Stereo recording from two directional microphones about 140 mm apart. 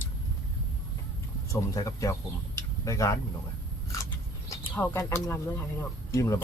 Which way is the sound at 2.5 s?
20° left (ahead or behind).